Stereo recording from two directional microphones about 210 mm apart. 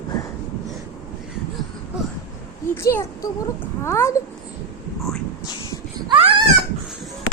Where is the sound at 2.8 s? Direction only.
15° left (ahead or behind).